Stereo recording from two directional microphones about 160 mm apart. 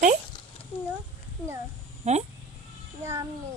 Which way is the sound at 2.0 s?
45° right (ahead or behind).